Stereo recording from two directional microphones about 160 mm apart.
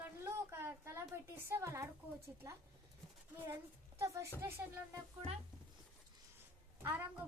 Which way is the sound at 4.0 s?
20° right (ahead or behind).